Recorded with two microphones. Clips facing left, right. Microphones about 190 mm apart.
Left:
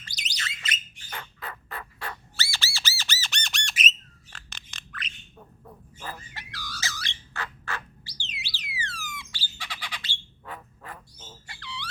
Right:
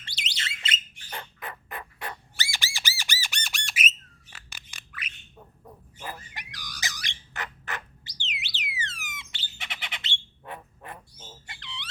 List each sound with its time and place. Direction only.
0.0 s bird: 25° right (ahead or behind)